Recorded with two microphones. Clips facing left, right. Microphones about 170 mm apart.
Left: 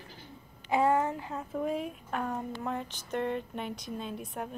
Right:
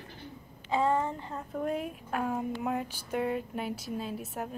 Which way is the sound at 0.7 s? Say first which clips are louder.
Left 2 dB; 10° left (ahead or behind).